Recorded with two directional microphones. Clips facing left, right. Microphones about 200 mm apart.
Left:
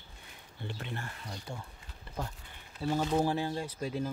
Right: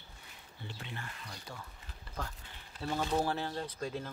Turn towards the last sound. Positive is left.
turn(degrees=10)  # may be behind; listen again after turning